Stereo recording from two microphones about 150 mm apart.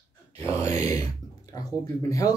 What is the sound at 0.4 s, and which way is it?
Speech, 20° left (ahead or behind).